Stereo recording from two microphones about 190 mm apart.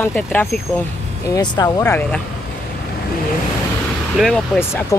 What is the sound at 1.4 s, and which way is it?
Speech, 20° left (ahead or behind).